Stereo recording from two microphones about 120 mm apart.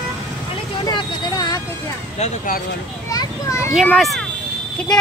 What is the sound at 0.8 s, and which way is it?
Speech, 35° left (ahead or behind).